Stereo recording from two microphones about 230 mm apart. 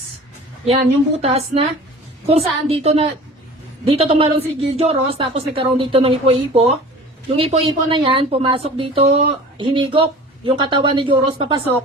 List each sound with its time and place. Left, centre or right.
1.2 s a woman's voice: right